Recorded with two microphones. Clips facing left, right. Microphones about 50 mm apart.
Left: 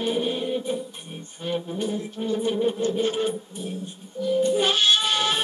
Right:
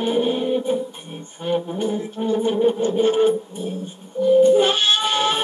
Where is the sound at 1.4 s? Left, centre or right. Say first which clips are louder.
Right 5 dB; centre.